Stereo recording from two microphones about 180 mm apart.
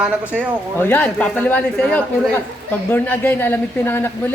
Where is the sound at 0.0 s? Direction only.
5° right (ahead or behind).